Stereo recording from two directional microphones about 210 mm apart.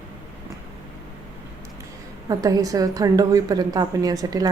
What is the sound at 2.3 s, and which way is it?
A woman's voice, 15° right (ahead or behind).